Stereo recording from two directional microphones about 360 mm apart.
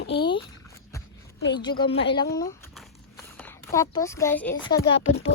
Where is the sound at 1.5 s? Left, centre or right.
Centre.